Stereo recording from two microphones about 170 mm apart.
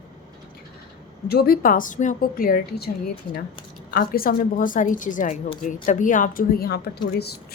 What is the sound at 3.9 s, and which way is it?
A woman's voice, 60° left (ahead or behind).